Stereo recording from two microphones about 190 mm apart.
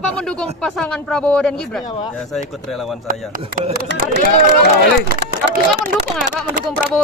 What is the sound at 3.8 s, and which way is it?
Speech, 55° right (ahead or behind).